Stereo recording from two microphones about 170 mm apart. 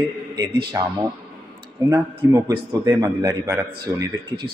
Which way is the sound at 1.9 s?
15° right (ahead or behind).